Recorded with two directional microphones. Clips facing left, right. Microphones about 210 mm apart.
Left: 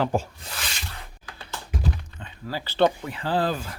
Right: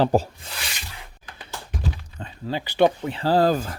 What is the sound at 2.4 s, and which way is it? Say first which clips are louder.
Speech: right 2 dB; 20° right (ahead or behind).